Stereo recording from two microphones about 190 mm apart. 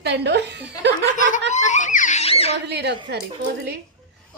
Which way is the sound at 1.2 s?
40° left (ahead or behind).